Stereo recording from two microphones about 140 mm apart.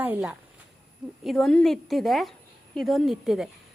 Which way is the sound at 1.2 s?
Centre (ahead or behind).